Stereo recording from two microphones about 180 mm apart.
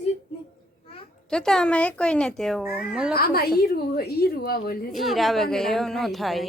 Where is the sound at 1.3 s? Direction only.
5° left (ahead or behind).